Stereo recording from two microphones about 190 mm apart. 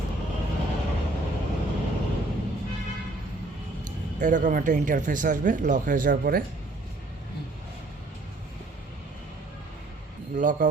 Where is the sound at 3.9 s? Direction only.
40° right (ahead or behind).